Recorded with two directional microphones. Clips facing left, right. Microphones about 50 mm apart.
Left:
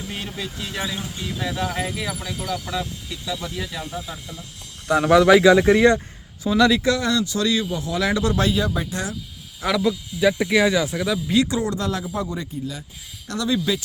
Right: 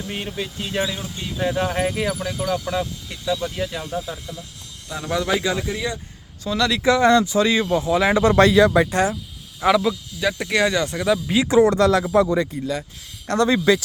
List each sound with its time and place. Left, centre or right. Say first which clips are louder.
0.1 s speech: right 3 dB; right
4.9 s speech: left 9 dB; left
6.4 s speech: left 4 dB; centre
6.8 s speech: right 6 dB; right
8.4 s speech: right 8 dB; right
8.9 s speech: right 8 dB; right
9.6 s speech: right 3 dB; centre
11.1 s speech: right 2 dB; centre
11.5 s speech: right 9 dB; right
11.8 s speech: right 9 dB; right
13.2 s speech: right 5 dB; right